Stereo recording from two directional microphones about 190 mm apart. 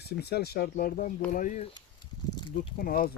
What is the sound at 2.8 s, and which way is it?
Speech, 50° left (ahead or behind).